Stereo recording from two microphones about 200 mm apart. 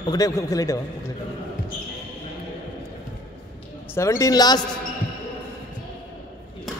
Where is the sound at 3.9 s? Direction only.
15° left (ahead or behind).